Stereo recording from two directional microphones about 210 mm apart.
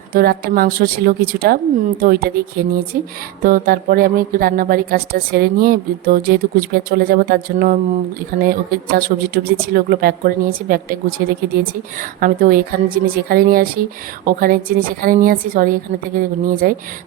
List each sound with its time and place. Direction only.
0.1 s speech: 45° right (ahead or behind)
11.9 s speech: 40° right (ahead or behind)